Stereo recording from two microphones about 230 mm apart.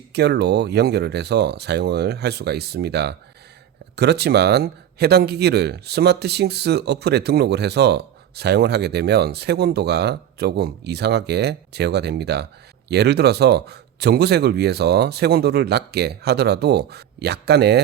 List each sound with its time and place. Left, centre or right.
0.1 s speech: right